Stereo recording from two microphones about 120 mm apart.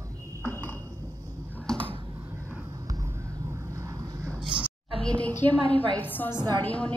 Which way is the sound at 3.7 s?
25° right (ahead or behind).